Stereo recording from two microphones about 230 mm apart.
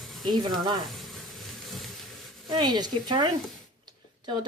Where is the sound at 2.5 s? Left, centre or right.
Centre.